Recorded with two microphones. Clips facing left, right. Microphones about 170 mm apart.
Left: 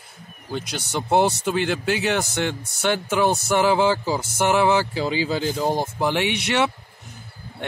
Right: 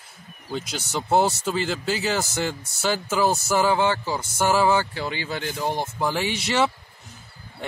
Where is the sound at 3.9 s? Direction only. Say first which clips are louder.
Left 4 dB; 10° left (ahead or behind).